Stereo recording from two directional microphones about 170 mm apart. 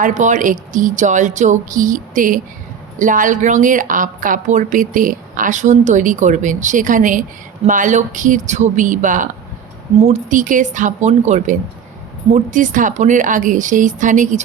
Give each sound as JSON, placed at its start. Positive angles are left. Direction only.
{"t": 0.0, "sound": "a woman's voice", "side_deg": -45}